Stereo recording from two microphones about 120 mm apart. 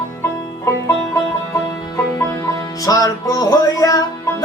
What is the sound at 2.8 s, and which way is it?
Music, 30° left (ahead or behind).